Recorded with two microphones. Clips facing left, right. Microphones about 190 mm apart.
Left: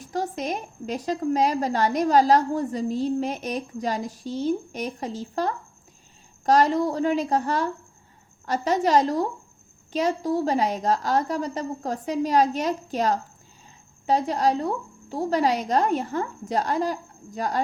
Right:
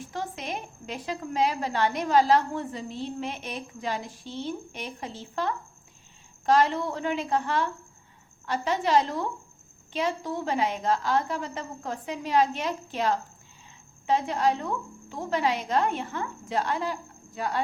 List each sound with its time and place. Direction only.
0.0 s a woman's voice: 40° left (ahead or behind)